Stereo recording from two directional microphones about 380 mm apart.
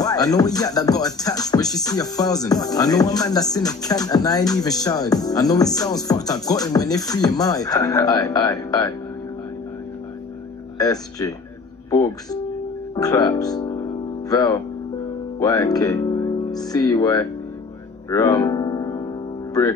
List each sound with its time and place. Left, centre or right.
0.0 s music: centre
10.8 s music: centre
15.3 s speech: centre
18.1 s music: centre